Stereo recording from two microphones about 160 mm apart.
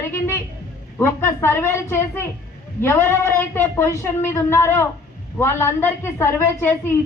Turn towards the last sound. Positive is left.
turn(degrees=15)  # may be behind; listen again after turning